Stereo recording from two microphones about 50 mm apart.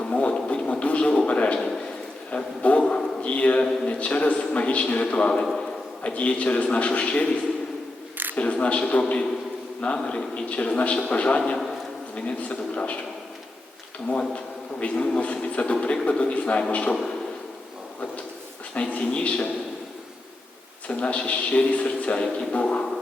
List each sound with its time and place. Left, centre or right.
0.0 s a sound: left
3.8 s a man's voice: left
8.4 s a man's voice: left
14.1 s a man's voice: left
18.7 s a man's voice: left
20.8 s a man's voice: left